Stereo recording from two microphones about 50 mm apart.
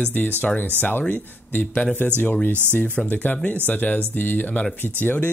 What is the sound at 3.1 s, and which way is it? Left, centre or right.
Speech, left.